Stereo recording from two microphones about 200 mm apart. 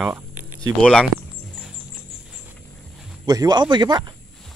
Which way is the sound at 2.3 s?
5° right (ahead or behind).